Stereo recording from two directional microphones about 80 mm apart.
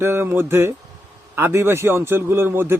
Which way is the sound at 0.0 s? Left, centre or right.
Right.